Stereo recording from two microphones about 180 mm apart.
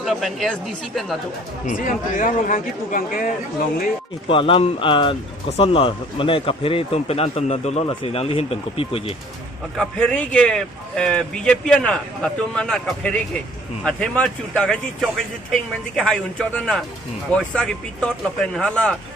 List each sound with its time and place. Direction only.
0.0 s speech: centre (ahead or behind)
1.6 s speech: 45° left (ahead or behind)
4.3 s speech: 30° left (ahead or behind)
9.7 s speech: 5° left (ahead or behind)